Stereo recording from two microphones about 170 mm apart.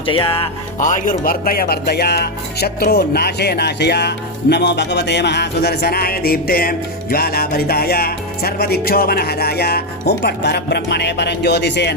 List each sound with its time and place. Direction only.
0.0 s speech: 30° left (ahead or behind)
0.8 s speech: 50° left (ahead or behind); by 11.9 s 80° left